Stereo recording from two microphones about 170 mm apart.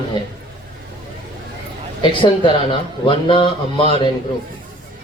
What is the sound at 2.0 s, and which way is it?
A man's voice, 30° left (ahead or behind).